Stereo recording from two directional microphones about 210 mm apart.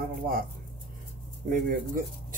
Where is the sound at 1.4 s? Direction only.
40° right (ahead or behind).